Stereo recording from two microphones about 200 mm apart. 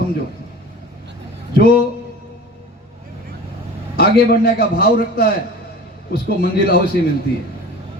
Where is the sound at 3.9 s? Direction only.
50° left (ahead or behind).